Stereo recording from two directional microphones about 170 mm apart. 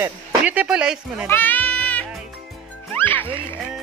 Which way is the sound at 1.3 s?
10° left (ahead or behind).